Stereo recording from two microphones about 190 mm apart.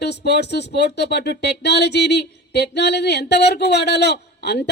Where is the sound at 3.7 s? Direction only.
60° left (ahead or behind).